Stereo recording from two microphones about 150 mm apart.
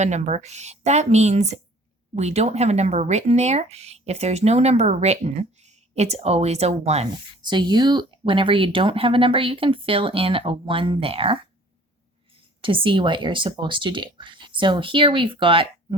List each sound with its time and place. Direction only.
0.0 s speech: 50° right (ahead or behind)
7.4 s speech: 30° right (ahead or behind)
12.6 s speech: 35° right (ahead or behind)